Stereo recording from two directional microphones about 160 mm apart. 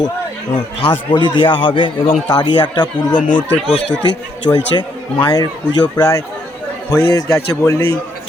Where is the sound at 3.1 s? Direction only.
55° left (ahead or behind).